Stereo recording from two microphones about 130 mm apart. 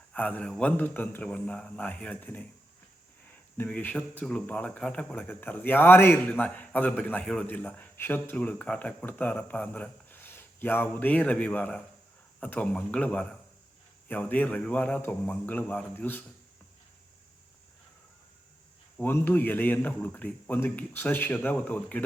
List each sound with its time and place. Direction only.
0.1 s speech: 10° left (ahead or behind)
18.9 s speech: 15° left (ahead or behind)